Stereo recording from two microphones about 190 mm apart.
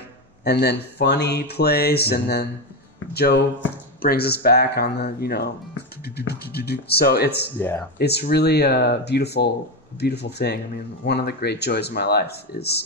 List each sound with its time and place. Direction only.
0.4 s speech: 60° left (ahead or behind)
7.5 s speech: 10° left (ahead or behind)
8.0 s speech: 60° left (ahead or behind)